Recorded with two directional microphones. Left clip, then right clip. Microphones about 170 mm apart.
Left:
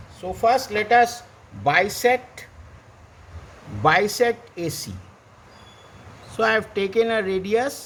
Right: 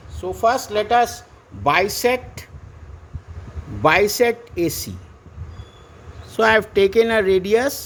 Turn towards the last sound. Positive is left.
turn(degrees=-40)  # may be behind; listen again after turning